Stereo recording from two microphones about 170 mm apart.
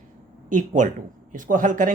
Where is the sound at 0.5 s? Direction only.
45° right (ahead or behind).